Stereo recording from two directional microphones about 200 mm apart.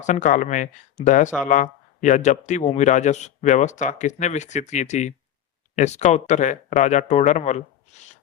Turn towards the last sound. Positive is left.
turn(degrees=35)  # may be behind; listen again after turning